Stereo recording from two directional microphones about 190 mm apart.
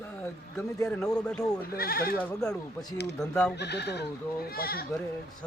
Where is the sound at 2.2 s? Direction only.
5° left (ahead or behind).